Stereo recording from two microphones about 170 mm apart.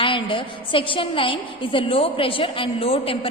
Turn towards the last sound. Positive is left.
turn(degrees=35)  # may be behind; listen again after turning